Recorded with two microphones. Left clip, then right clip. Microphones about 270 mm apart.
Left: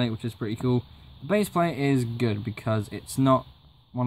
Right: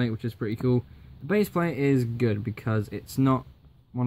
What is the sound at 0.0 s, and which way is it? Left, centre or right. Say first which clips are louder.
Speech: even; centre.